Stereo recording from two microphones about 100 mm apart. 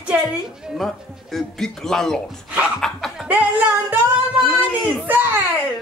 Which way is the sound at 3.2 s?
15° right (ahead or behind).